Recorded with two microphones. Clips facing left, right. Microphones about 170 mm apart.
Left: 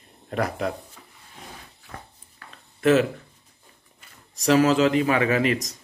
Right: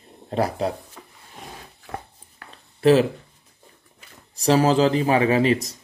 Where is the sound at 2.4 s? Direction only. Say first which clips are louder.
Right 3 dB; 30° right (ahead or behind).